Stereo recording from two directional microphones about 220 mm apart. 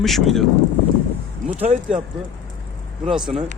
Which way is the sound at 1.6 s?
30° right (ahead or behind).